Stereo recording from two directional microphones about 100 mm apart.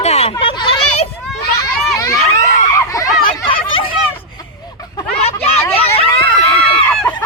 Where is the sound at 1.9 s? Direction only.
35° left (ahead or behind).